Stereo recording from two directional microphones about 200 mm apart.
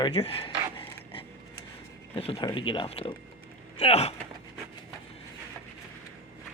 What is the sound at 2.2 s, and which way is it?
Speech, 30° left (ahead or behind).